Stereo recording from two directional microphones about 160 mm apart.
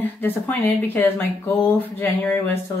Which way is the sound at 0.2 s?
10° left (ahead or behind).